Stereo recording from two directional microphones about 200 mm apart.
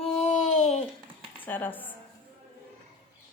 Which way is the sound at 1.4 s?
10° left (ahead or behind).